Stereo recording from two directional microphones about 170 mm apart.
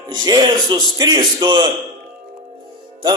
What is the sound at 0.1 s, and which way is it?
A man's voice, 25° right (ahead or behind).